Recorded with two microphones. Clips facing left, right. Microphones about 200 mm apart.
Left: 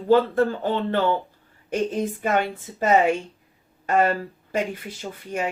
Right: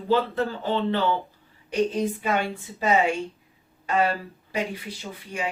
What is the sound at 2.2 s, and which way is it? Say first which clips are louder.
Speech: left 3 dB; 50° left (ahead or behind).